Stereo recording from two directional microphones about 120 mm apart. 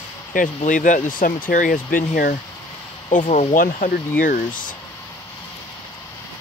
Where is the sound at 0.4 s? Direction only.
90° left.